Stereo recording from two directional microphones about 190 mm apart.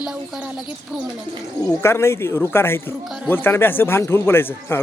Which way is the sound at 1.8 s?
15° left (ahead or behind).